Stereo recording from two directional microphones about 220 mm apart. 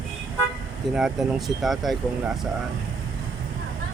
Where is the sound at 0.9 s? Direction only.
Centre (ahead or behind).